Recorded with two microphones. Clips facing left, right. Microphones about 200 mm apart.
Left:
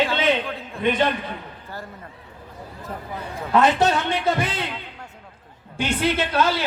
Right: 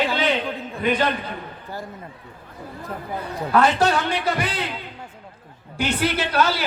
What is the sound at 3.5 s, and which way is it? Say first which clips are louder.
A woman's voice: even; 20° left (ahead or behind).